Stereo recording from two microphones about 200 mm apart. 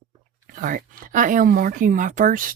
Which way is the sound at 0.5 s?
40° right (ahead or behind).